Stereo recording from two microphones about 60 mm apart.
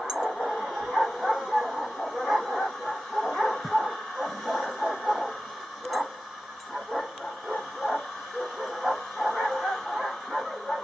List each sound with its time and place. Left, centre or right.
0.0 s a sound: centre
0.7 s bow-wow: centre
6.9 s bow-wow: centre